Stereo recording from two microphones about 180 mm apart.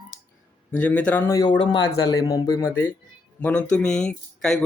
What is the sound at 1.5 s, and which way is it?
Speech, 75° left (ahead or behind).